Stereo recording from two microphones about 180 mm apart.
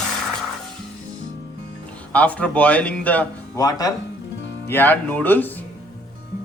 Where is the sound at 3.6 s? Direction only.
20° left (ahead or behind).